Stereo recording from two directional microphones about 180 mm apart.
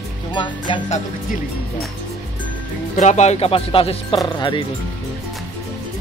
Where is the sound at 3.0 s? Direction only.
40° left (ahead or behind).